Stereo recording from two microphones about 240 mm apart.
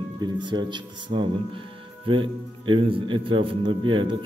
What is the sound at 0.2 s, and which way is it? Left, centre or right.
Speech, centre.